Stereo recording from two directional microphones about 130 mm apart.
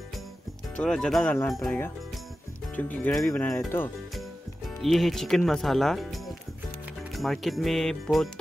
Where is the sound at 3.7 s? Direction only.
15° left (ahead or behind).